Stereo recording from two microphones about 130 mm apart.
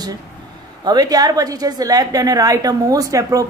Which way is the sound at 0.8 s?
30° right (ahead or behind).